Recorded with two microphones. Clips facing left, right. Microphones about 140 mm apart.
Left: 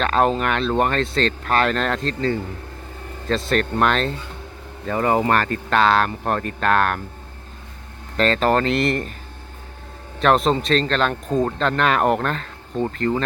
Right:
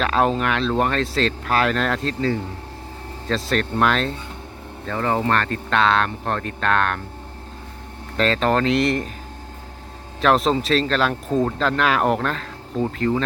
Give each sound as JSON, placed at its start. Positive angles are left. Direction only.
{"t": 0.0, "sound": "a man's voice", "side_deg": 0}
{"t": 4.9, "sound": "a man's voice", "side_deg": 10}
{"t": 8.1, "sound": "a man's voice", "side_deg": 0}
{"t": 10.2, "sound": "a man's voice", "side_deg": 0}